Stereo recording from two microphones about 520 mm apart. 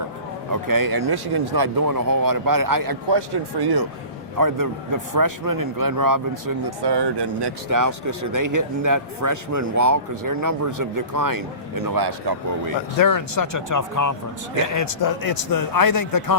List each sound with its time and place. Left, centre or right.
0.5 s speech: right
7.7 s speech: right
13.0 s speech: left